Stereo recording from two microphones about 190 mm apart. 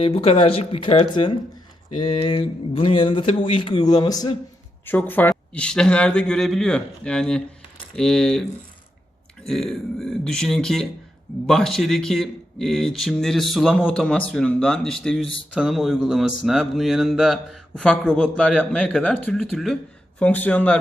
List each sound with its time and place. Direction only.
0.0 s speech: 30° left (ahead or behind)
4.9 s speech: 10° left (ahead or behind)
9.5 s speech: centre (ahead or behind)